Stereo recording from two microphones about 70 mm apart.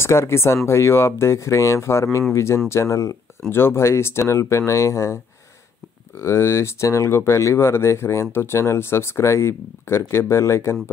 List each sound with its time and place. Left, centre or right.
0.0 s speech: left
3.4 s speech: left